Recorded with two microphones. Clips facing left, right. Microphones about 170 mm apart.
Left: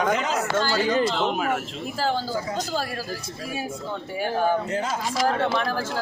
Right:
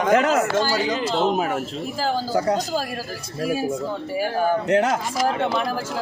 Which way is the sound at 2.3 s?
80° right.